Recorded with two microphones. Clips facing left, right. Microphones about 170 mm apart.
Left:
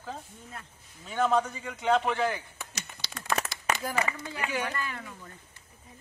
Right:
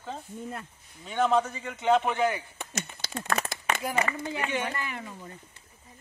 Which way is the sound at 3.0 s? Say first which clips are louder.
Right 7 dB; 50° right (ahead or behind).